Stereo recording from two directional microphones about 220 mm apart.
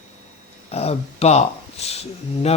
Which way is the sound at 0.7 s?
30° left (ahead or behind).